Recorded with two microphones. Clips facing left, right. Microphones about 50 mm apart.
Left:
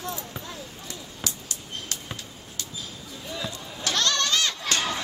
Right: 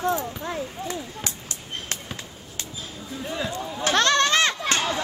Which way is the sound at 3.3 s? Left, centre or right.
Right.